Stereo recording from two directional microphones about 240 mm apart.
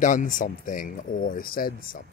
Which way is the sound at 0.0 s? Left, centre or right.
Left.